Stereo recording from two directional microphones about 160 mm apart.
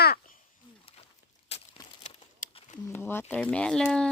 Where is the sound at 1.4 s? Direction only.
40° left (ahead or behind).